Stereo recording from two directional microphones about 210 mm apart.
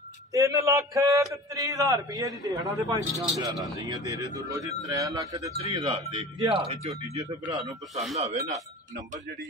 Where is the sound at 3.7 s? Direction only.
20° right (ahead or behind).